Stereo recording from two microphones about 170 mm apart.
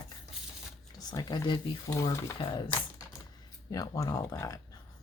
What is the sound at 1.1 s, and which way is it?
Speech, 25° left (ahead or behind).